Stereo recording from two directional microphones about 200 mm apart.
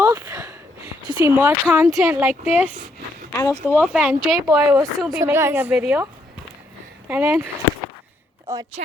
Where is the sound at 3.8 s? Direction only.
5° right (ahead or behind).